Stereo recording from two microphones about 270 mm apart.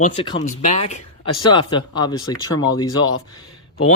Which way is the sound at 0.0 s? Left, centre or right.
Left.